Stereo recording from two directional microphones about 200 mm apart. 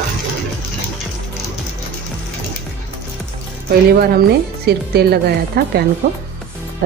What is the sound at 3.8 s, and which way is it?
A woman's voice, 50° right (ahead or behind).